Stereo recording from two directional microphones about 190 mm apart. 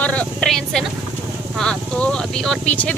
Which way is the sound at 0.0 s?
5° left (ahead or behind).